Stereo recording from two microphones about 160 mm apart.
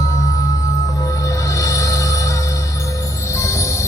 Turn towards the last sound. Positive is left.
turn(degrees=20)  # may be behind; listen again after turning